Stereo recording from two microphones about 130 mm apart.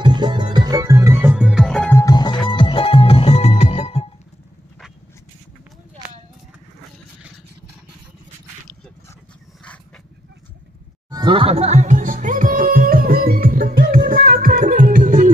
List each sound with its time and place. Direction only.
0.0 s music: 35° right (ahead or behind); by 1.6 s 10° right (ahead or behind)
1.6 s music: 5° left (ahead or behind)
2.0 s music: 30° left (ahead or behind); by 4.1 s 50° left (ahead or behind)
11.1 s music: 35° right (ahead or behind); by 15.3 s 90° right